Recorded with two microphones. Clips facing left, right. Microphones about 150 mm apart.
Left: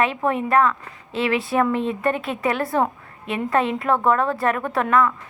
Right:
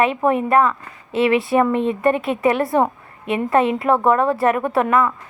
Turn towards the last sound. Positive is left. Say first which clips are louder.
# right 2 dB
turn(degrees=-5)  # may be behind; listen again after turning